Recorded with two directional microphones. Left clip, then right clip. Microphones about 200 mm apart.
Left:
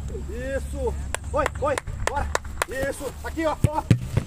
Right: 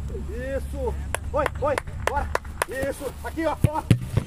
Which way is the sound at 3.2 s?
20° left (ahead or behind).